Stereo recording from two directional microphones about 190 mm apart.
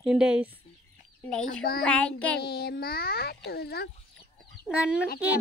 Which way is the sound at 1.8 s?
5° left (ahead or behind).